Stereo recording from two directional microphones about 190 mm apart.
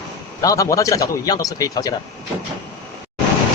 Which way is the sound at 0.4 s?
15° left (ahead or behind).